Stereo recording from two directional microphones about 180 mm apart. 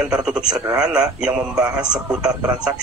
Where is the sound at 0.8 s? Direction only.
5° right (ahead or behind).